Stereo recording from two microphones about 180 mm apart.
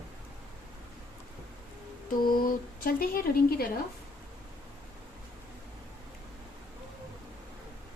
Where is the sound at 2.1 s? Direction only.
50° left (ahead or behind).